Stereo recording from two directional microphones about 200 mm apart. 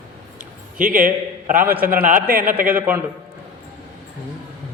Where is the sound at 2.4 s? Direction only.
10° right (ahead or behind).